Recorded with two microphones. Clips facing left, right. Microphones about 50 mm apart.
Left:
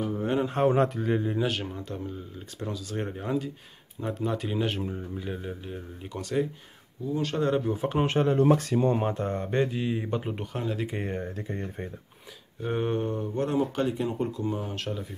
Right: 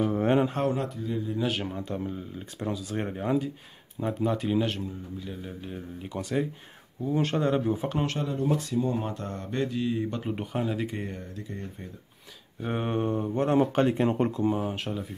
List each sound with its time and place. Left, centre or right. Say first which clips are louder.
0.0 s a sound: right 4 dB; right
0.8 s speech: left 5 dB; left
1.5 s speech: right 2 dB; centre
4.8 s speech: left 3 dB; left
5.7 s speech: right 1 dB; centre
7.9 s a man's voice: left 3 dB; centre
8.4 s speech: left 2 dB; left
8.9 s speech: left 5 dB; left
10.3 s speech: right 2 dB; centre
11.1 s speech: left 5 dB; left
12.6 s speech: left 1 dB; centre
13.0 s a sound: right 2 dB; right
13.6 s speech: right 5 dB; right
14.3 s speech: right 4 dB; right